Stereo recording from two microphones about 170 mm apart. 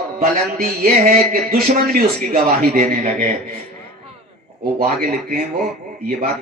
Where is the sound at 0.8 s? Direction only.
50° right (ahead or behind).